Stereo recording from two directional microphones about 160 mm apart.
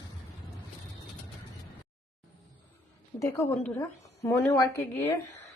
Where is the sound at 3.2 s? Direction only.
20° left (ahead or behind).